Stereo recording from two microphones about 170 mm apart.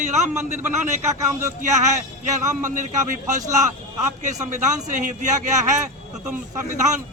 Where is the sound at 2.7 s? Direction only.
50° right (ahead or behind).